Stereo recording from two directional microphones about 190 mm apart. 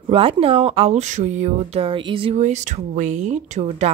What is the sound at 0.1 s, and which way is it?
Speech, 30° right (ahead or behind).